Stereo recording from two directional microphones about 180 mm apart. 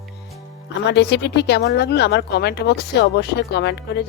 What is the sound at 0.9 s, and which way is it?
Speech, 75° left (ahead or behind).